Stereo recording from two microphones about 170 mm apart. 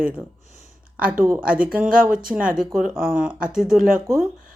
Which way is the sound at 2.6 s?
5° right (ahead or behind).